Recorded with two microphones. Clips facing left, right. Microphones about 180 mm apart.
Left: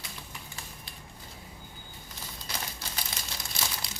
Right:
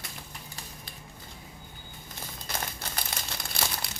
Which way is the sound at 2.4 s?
50° right (ahead or behind).